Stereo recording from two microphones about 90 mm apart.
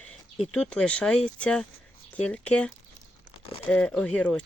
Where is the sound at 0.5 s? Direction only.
10° left (ahead or behind).